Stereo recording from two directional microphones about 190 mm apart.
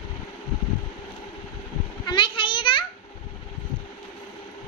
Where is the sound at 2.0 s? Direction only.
25° left (ahead or behind).